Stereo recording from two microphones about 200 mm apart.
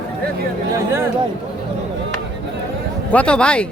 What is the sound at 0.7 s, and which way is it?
Speech, 10° right (ahead or behind).